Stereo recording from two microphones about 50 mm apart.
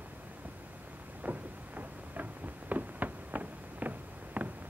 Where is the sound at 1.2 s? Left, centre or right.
Right.